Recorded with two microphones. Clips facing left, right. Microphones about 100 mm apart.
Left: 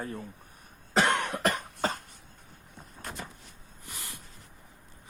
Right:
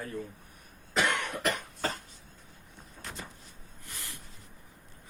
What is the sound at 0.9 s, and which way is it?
Cough, 40° left (ahead or behind).